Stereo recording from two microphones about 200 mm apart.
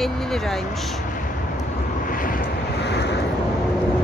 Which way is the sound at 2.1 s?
45° left (ahead or behind).